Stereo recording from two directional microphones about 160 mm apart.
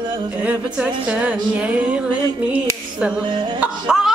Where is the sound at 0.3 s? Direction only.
10° right (ahead or behind).